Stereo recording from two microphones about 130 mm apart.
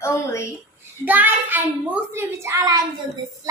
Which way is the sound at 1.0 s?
15° right (ahead or behind).